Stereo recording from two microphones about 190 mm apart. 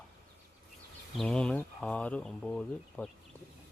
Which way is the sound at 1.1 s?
5° left (ahead or behind).